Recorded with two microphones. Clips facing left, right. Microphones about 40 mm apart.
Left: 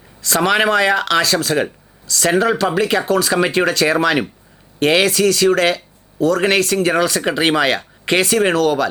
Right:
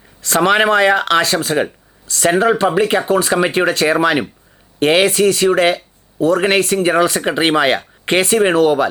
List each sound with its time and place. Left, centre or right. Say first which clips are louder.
0.2 s speech: right 2 dB; right